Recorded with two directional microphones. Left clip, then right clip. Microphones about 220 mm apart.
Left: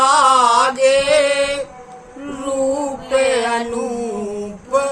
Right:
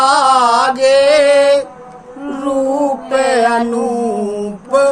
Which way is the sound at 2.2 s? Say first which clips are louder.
Right 3 dB; centre (ahead or behind).